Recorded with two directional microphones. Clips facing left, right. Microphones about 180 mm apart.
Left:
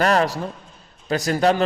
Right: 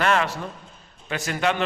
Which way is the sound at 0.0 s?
40° left (ahead or behind).